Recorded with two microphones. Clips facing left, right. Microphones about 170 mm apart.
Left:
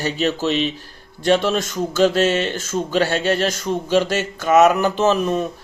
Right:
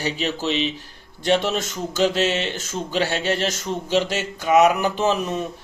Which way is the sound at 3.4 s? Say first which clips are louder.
Left 4 dB; 20° right (ahead or behind).